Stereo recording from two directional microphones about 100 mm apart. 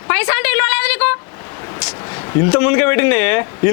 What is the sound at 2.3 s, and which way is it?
Speech, 25° left (ahead or behind).